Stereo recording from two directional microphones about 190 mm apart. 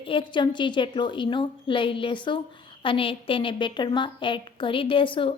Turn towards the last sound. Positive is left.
turn(degrees=25)  # may be behind; listen again after turning